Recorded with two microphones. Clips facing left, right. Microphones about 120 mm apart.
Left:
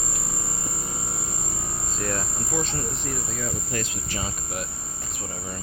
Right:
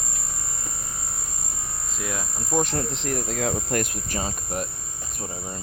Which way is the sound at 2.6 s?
70° right (ahead or behind).